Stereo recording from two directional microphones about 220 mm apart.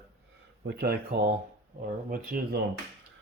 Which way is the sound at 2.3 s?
40° right (ahead or behind).